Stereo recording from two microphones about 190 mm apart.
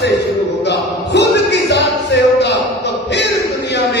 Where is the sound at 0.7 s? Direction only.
65° left (ahead or behind).